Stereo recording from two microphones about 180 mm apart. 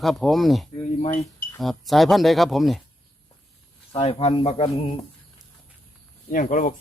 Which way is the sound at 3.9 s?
35° left (ahead or behind).